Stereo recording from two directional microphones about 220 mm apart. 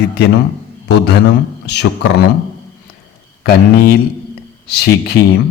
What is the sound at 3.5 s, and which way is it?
A man's voice, 45° left (ahead or behind).